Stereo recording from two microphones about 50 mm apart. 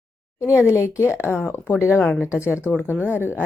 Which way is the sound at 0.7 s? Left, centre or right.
Left.